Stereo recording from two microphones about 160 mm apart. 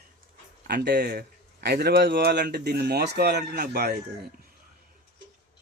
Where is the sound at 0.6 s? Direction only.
90° right; by 4.0 s 75° right (ahead or behind).